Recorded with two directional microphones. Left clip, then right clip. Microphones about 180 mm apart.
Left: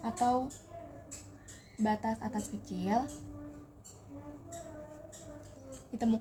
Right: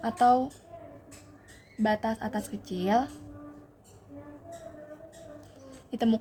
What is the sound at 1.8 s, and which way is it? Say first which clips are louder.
A woman's voice: right 5 dB; 50° right (ahead or behind).